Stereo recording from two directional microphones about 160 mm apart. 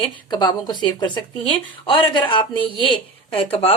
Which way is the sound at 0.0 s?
25° left (ahead or behind).